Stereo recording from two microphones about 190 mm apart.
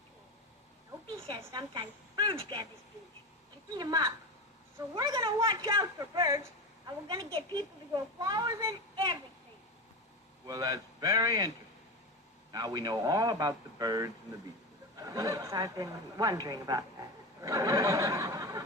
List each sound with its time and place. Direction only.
1.1 s a sound: 30° right (ahead or behind)
1.5 s speech: 25° right (ahead or behind)
3.8 s a woman's voice: 20° right (ahead or behind)
10.4 s a woman's voice: 20° right (ahead or behind)